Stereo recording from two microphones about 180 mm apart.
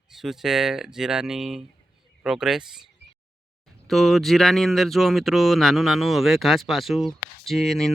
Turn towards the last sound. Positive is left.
turn(degrees=0)  # may be behind; listen again after turning